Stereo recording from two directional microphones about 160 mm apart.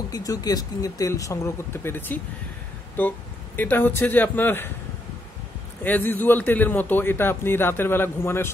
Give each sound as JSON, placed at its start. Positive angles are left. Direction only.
{"t": 0.1, "sound": "a man's voice", "side_deg": 25}
{"t": 5.9, "sound": "a man's voice", "side_deg": 10}